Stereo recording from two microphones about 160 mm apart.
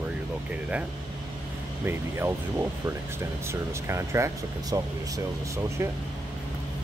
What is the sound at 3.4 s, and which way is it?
Speech, 15° right (ahead or behind).